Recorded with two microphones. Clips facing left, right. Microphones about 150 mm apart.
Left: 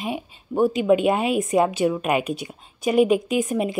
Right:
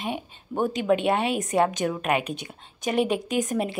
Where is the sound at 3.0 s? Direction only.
35° right (ahead or behind).